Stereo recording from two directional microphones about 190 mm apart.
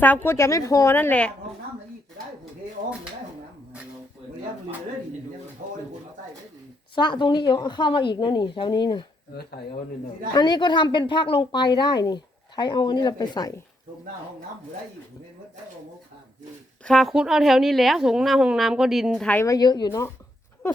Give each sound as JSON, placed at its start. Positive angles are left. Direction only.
{"t": 0.0, "sound": "a woman's voice", "side_deg": 10}
{"t": 6.9, "sound": "a woman's voice", "side_deg": 25}
{"t": 10.3, "sound": "a woman's voice", "side_deg": 20}
{"t": 16.8, "sound": "a woman's voice", "side_deg": 0}